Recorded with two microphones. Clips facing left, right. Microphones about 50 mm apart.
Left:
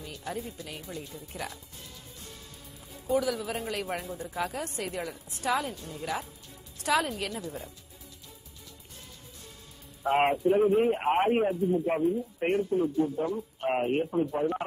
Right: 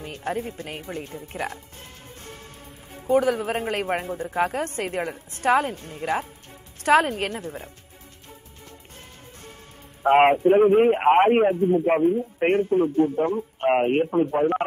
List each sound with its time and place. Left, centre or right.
0.0 s a man's voice: right
10.0 s a man's voice: right